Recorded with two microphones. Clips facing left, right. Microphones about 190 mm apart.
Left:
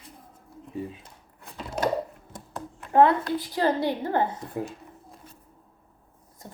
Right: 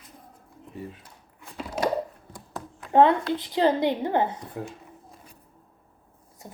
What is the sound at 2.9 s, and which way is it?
A woman's voice, 20° right (ahead or behind).